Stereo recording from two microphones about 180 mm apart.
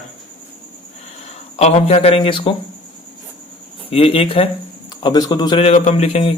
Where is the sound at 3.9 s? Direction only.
30° left (ahead or behind).